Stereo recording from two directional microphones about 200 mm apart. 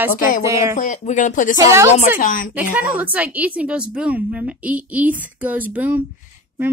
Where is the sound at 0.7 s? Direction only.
40° left (ahead or behind).